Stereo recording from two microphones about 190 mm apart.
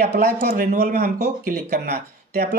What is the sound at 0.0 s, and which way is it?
Speech, 55° right (ahead or behind).